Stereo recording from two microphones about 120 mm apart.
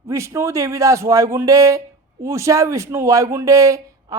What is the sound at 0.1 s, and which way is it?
Speech, 25° right (ahead or behind).